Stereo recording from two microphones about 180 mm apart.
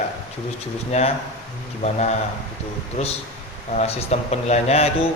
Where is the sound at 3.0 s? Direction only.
35° left (ahead or behind).